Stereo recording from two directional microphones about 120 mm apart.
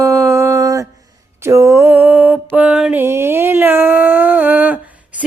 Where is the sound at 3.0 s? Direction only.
20° right (ahead or behind).